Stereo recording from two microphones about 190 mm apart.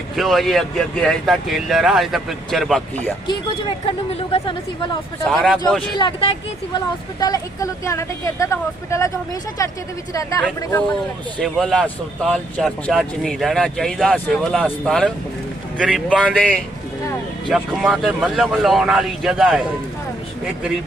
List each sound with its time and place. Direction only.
0.2 s speech: centre (ahead or behind)
3.8 s speech: 30° left (ahead or behind)
5.3 s speech: centre (ahead or behind)
6.0 s speech: 25° left (ahead or behind)
11.3 s speech: centre (ahead or behind)
16.3 s speech: 5° left (ahead or behind)